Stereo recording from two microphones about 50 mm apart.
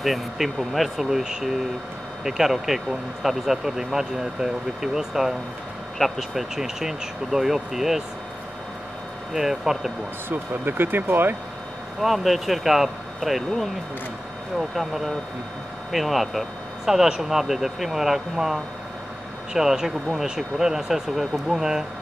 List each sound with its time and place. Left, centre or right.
0.0 s speech: centre
9.3 s speech: centre
10.3 s speech: right
12.0 s speech: centre
14.8 s speech: centre